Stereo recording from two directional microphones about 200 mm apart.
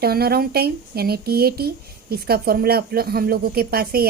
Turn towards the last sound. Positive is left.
turn(degrees=-50)  # may be behind; listen again after turning